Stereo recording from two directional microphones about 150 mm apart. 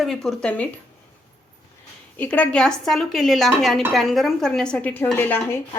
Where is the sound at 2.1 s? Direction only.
10° left (ahead or behind).